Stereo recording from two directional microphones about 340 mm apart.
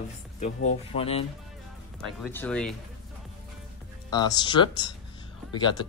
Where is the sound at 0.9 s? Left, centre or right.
Centre.